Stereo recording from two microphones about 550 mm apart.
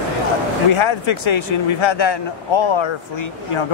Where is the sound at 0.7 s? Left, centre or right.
Left.